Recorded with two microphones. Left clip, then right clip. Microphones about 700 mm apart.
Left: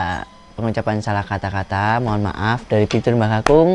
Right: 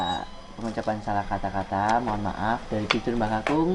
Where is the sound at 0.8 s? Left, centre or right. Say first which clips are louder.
Left 5 dB; left.